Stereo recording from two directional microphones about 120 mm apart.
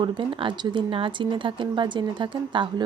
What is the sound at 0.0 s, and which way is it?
Speech, 45° right (ahead or behind).